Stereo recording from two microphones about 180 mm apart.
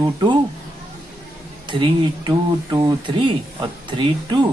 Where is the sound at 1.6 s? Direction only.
25° right (ahead or behind).